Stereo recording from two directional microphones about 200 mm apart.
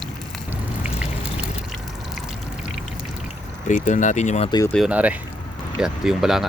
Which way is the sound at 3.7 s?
40° left (ahead or behind).